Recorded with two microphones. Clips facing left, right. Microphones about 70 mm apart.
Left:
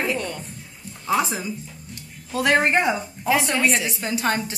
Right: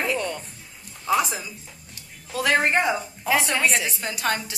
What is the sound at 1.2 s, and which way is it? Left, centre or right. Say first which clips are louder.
A woman's voice: left 2 dB; left.